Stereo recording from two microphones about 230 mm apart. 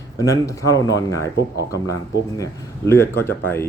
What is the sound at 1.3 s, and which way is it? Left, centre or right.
Speech, left.